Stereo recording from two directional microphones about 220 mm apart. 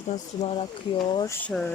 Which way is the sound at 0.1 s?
25° left (ahead or behind).